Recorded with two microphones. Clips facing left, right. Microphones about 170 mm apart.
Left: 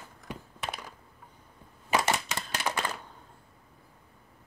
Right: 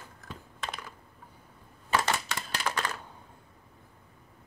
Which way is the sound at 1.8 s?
15° left (ahead or behind).